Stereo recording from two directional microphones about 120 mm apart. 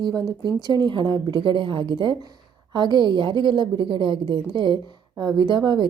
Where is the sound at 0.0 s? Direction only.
35° right (ahead or behind).